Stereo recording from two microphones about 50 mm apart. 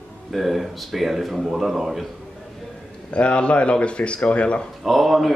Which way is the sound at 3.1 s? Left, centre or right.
Left.